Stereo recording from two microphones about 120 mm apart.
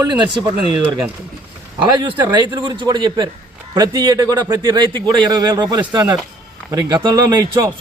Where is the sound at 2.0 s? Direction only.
40° right (ahead or behind).